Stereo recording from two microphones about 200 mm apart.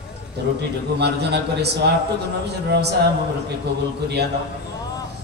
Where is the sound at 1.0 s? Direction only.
55° right (ahead or behind).